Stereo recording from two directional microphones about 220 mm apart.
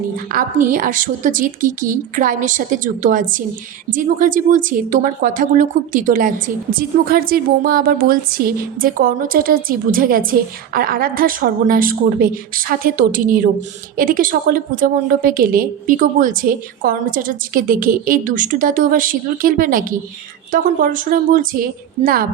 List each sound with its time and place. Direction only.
0.3 s a woman's voice: 40° right (ahead or behind)